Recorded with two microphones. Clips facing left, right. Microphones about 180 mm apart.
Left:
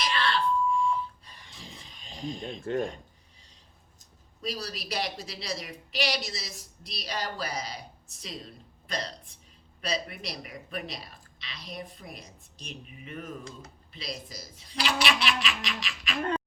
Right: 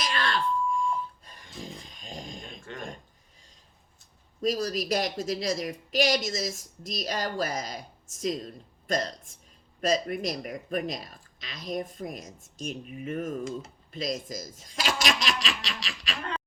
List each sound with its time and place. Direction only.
0.0 s alarm clock: 45° right (ahead or behind)
1.6 s a sound: 45° right (ahead or behind)
2.7 s speech: 40° left (ahead or behind)
4.4 s a woman's voice: 45° right (ahead or behind)